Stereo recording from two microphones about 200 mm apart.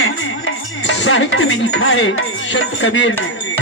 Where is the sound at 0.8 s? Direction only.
65° left (ahead or behind).